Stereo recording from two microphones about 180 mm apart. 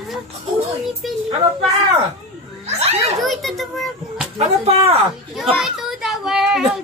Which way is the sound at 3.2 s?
Centre (ahead or behind).